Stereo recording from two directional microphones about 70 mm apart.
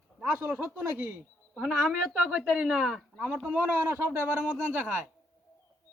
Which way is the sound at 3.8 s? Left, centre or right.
Right.